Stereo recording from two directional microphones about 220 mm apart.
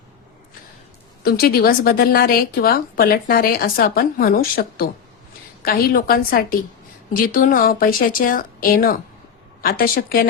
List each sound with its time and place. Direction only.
1.2 s a woman's voice: 45° left (ahead or behind)